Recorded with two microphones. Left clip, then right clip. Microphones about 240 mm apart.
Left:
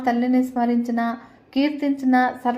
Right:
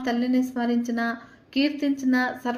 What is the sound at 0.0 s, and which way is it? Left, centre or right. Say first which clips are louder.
A woman's voice: left 4 dB; centre.